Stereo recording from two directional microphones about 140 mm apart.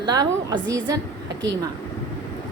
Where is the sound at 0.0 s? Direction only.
30° right (ahead or behind).